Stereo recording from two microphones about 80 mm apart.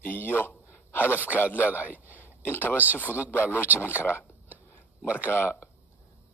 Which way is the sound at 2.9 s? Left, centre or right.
Centre.